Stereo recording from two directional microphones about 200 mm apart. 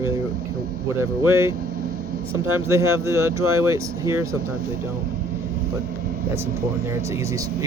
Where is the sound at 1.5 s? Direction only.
50° right (ahead or behind).